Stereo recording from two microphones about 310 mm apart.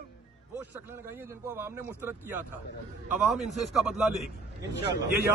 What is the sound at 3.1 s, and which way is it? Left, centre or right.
A man's voice, centre.